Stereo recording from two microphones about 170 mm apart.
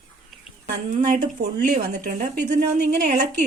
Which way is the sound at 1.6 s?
55° right (ahead or behind).